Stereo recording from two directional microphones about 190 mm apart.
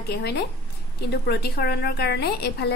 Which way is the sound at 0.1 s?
60° left (ahead or behind).